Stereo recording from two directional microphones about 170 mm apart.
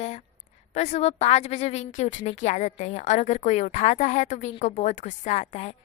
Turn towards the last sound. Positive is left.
turn(degrees=40)  # may be behind; listen again after turning